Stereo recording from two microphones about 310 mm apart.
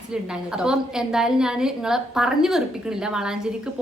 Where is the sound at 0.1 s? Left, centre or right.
Centre.